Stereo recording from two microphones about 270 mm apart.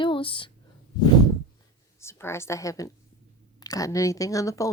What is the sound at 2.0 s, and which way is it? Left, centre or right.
A woman's voice, centre.